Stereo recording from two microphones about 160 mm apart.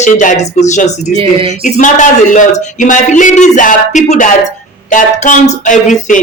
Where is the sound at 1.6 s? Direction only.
50° left (ahead or behind).